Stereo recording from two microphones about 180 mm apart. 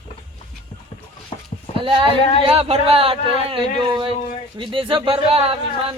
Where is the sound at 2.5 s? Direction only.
35° right (ahead or behind).